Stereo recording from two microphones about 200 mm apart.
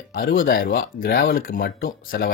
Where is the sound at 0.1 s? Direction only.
45° left (ahead or behind).